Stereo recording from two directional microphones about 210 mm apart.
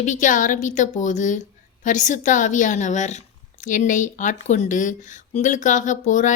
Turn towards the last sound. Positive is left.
turn(degrees=35)  # may be behind; listen again after turning